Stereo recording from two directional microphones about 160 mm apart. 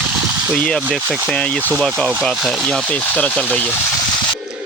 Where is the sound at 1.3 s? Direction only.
5° left (ahead or behind).